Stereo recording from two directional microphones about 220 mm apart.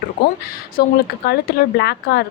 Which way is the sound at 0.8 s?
45° left (ahead or behind).